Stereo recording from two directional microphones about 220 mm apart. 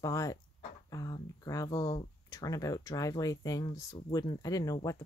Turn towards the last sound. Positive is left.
turn(degrees=15)  # may be behind; listen again after turning